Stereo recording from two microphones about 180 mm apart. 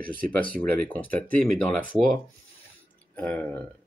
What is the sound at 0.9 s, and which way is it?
Speech, 10° left (ahead or behind).